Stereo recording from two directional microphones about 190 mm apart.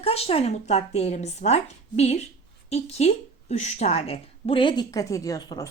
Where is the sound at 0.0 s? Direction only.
30° left (ahead or behind).